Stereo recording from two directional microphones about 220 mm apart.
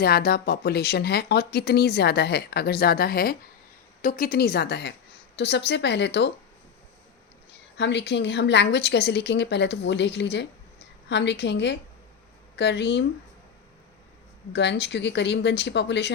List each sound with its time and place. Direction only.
0.0 s speech: 45° left (ahead or behind)
7.8 s speech: 50° left (ahead or behind)
14.5 s speech: 50° left (ahead or behind)